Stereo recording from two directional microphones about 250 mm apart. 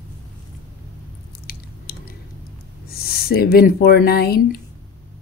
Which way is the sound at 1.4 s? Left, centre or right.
Left.